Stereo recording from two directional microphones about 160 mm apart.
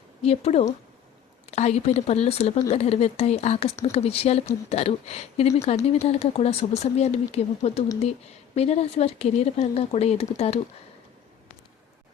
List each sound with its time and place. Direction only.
0.2 s speech: 40° left (ahead or behind)